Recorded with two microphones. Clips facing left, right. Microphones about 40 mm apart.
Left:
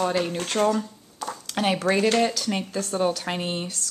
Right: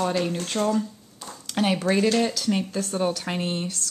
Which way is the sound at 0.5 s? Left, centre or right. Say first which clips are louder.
Left 3 dB; left.